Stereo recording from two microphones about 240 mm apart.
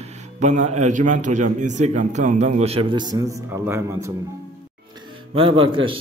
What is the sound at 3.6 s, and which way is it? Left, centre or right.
Speech, centre.